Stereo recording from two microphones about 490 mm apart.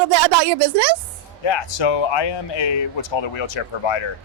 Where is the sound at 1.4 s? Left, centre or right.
Left.